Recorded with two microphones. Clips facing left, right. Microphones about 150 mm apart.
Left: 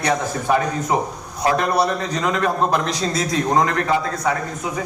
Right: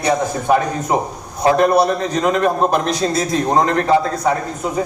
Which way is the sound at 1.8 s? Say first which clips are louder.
Right 4 dB; 50° right (ahead or behind).